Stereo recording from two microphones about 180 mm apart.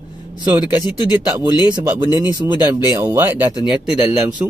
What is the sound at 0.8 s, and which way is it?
Speech, 20° left (ahead or behind).